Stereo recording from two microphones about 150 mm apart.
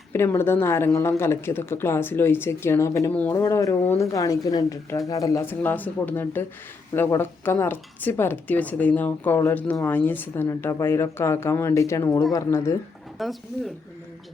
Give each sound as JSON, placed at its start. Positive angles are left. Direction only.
{"t": 0.1, "sound": "speech", "side_deg": 15}
{"t": 3.3, "sound": "speech", "side_deg": 20}
{"t": 13.1, "sound": "speech", "side_deg": 0}